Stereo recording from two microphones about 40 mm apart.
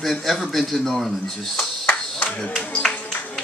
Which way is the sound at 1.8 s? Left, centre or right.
Left.